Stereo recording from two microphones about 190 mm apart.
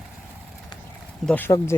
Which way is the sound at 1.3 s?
10° left (ahead or behind).